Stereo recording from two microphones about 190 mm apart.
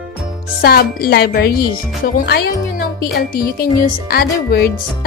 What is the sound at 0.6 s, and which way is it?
Speech, 50° left (ahead or behind).